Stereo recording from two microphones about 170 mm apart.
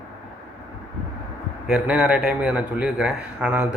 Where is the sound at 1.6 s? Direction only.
5° right (ahead or behind).